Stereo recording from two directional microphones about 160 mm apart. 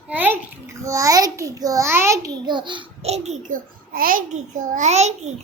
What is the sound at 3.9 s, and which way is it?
A child's voice, 60° right (ahead or behind).